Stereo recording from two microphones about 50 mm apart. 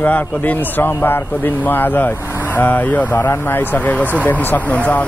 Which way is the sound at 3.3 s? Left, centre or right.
Left.